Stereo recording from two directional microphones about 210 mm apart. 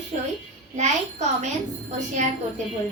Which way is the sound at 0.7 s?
35° right (ahead or behind).